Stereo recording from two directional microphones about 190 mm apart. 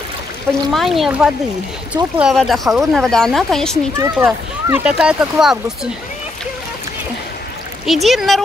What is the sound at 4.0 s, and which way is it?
Speech, 10° right (ahead or behind).